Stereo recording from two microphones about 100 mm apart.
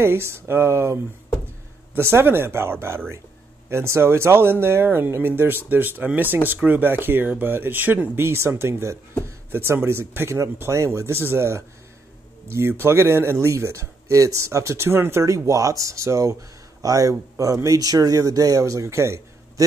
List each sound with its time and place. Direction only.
0.0 s speech: 25° right (ahead or behind)
2.0 s speech: 25° right (ahead or behind)